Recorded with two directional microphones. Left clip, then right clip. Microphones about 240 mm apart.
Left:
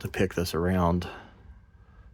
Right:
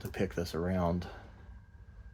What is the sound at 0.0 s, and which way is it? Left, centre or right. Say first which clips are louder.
Speech: left 7 dB; left.